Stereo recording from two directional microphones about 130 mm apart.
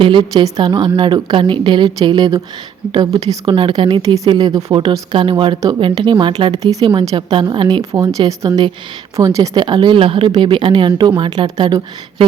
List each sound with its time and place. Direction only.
0.0 s speech: 40° right (ahead or behind)